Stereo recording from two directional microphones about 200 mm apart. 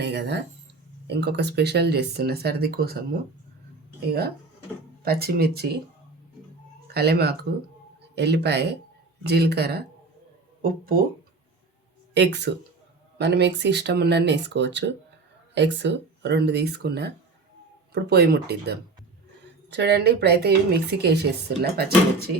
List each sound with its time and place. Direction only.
0.0 s speech: 55° right (ahead or behind)
5.0 s speech: 50° right (ahead or behind)
6.9 s speech: 55° right (ahead or behind)
12.1 s speech: 60° right (ahead or behind)